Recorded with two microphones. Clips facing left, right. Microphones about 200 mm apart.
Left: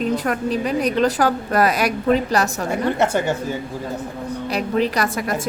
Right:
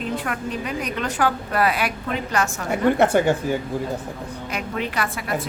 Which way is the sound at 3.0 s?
15° right (ahead or behind).